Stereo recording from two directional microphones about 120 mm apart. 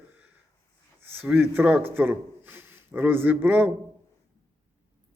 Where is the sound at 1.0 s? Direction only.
15° right (ahead or behind).